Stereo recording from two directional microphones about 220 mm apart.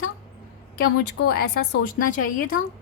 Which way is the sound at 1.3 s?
45° left (ahead or behind).